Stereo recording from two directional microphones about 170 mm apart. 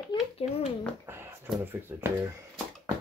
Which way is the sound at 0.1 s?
35° left (ahead or behind).